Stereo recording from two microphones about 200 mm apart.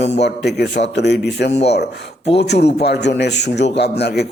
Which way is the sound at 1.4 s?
35° left (ahead or behind).